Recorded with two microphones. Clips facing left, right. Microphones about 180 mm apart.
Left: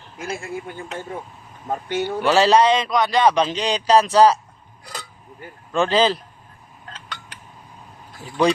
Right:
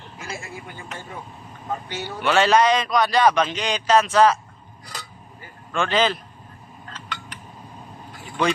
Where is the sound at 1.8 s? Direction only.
55° left (ahead or behind).